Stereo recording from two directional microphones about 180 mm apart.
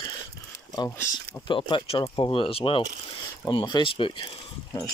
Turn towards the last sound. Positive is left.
turn(degrees=30)  # may be behind; listen again after turning